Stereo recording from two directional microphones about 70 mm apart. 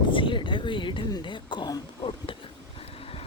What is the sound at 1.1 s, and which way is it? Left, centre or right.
Throat clearing, left.